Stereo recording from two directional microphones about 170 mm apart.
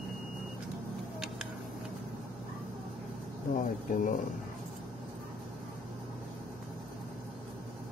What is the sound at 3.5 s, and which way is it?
Speech, 50° left (ahead or behind).